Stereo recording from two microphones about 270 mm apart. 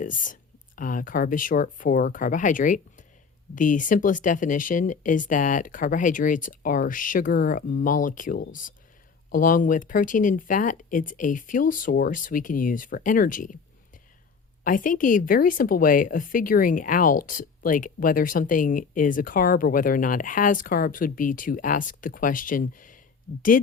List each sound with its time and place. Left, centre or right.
0.0 s speech: left
14.6 s speech: left